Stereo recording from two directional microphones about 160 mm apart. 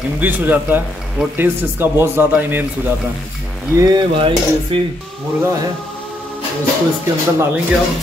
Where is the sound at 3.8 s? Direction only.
30° right (ahead or behind).